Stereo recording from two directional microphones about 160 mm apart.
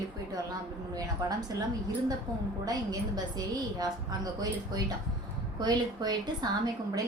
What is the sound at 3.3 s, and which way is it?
A woman's voice, 25° right (ahead or behind).